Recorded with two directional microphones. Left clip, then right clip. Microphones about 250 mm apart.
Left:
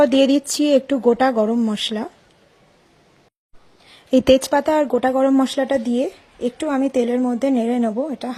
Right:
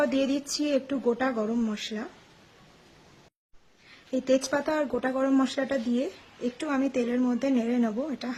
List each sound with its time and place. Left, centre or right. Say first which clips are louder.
0.0 s speech: left 12 dB; left
4.1 s speech: left 11 dB; left